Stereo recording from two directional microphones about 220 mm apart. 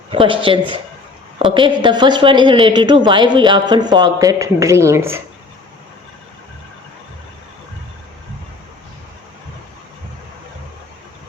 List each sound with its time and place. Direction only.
0.1 s a woman's voice: 25° right (ahead or behind)